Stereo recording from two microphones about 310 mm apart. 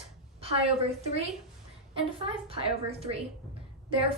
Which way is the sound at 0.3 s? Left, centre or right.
Centre.